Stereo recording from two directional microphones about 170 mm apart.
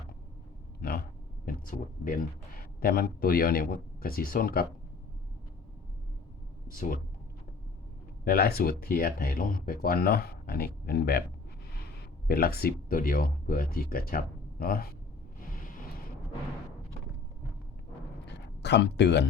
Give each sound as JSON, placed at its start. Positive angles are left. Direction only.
{"t": 0.8, "sound": "a sound", "side_deg": 60}
{"t": 1.5, "sound": "speech", "side_deg": 55}
{"t": 6.7, "sound": "speech", "side_deg": 50}
{"t": 8.2, "sound": "speech", "side_deg": 60}
{"t": 12.3, "sound": "speech", "side_deg": 65}
{"t": 18.3, "sound": "a sound", "side_deg": 90}